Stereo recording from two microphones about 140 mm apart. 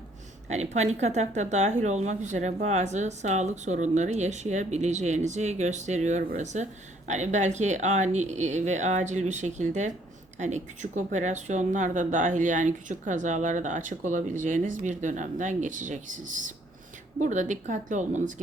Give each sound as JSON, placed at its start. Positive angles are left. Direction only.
{"t": 0.4, "sound": "speech", "side_deg": -55}